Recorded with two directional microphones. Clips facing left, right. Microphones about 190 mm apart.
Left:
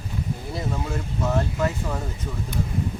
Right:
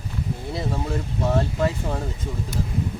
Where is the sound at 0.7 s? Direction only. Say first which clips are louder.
Right 2 dB; 30° right (ahead or behind).